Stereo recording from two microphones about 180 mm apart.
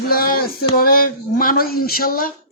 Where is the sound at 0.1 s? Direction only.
55° left (ahead or behind).